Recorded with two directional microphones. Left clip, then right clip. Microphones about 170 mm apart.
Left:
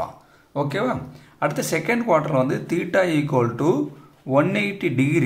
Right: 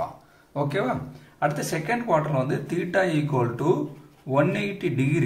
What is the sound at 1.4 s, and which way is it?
A man's voice, 35° left (ahead or behind).